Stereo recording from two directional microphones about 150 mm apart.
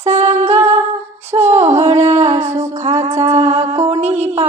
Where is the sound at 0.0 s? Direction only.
45° right (ahead or behind).